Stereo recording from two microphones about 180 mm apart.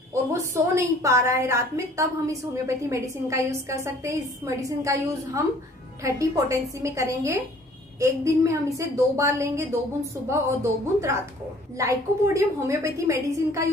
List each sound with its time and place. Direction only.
0.3 s a woman's voice: 15° right (ahead or behind)
12.4 s a woman's voice: 15° right (ahead or behind)